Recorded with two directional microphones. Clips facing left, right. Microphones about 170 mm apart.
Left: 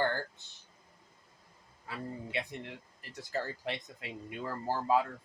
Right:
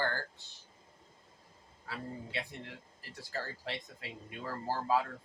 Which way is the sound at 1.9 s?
20° left (ahead or behind).